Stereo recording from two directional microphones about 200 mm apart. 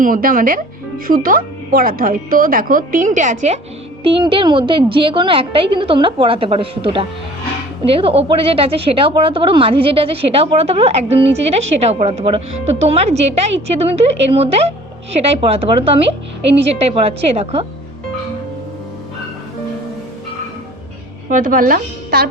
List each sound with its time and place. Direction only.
0.0 s a woman's voice: 45° right (ahead or behind); by 17.7 s 30° right (ahead or behind)
21.2 s speech: 40° right (ahead or behind)